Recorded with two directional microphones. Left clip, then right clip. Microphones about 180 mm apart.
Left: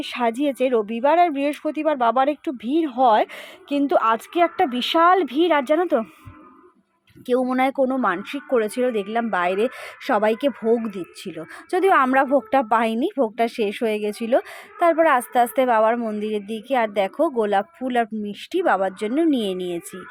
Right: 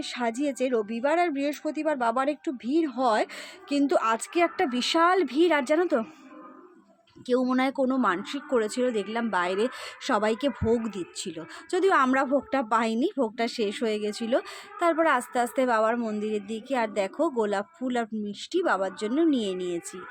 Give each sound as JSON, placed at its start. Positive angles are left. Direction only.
{"t": 0.0, "sound": "speech", "side_deg": 25}
{"t": 7.3, "sound": "speech", "side_deg": 15}